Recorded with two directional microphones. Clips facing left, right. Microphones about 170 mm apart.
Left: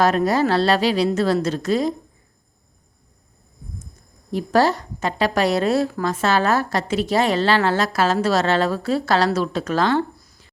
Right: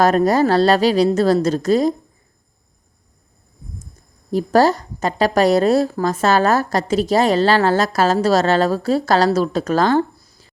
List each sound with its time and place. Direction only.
0.0 s a woman's voice: 40° right (ahead or behind)
4.3 s a woman's voice: 40° right (ahead or behind)